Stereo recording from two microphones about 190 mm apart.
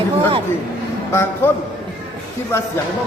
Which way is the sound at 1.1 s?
10° left (ahead or behind).